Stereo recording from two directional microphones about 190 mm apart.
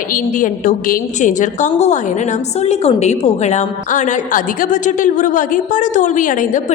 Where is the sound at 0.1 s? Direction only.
45° left (ahead or behind).